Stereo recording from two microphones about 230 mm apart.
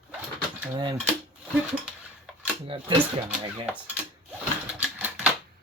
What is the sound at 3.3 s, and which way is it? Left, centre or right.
Speech, centre.